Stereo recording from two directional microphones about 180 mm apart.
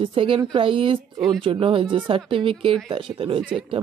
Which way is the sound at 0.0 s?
30° right (ahead or behind).